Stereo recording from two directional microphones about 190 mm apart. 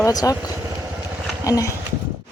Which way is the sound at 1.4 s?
20° left (ahead or behind).